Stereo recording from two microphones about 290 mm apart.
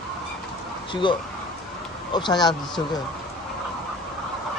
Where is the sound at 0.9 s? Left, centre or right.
Centre.